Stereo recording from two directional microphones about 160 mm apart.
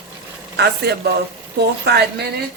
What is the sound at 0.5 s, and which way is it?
A man's voice, 90° right.